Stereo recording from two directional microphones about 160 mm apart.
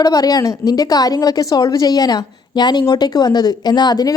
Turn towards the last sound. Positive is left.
turn(degrees=25)  # may be behind; listen again after turning